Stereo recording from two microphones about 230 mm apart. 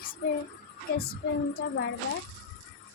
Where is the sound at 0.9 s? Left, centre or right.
Left.